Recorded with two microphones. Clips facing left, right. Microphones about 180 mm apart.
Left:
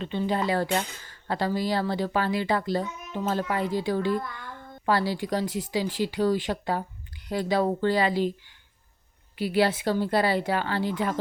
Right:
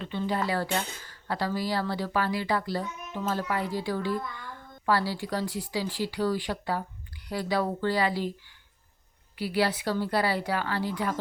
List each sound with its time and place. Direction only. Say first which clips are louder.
0.0 s a woman's voice: left 3 dB; 20° left (ahead or behind)